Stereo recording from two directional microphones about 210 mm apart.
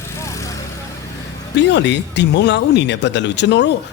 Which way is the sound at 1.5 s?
55° left (ahead or behind).